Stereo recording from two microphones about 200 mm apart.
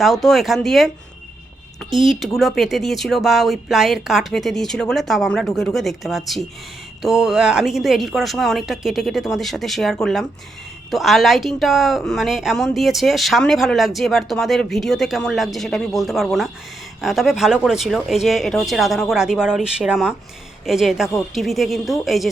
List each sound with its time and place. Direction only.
0.0 s a woman's voice: centre (ahead or behind)
2.0 s a woman's voice: centre (ahead or behind)